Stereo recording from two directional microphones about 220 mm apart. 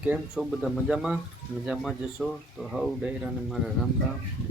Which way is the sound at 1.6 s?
Centre (ahead or behind).